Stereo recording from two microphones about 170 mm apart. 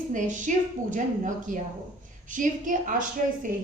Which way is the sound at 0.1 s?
50° right (ahead or behind).